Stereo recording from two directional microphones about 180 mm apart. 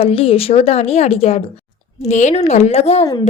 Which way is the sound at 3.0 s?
20° left (ahead or behind).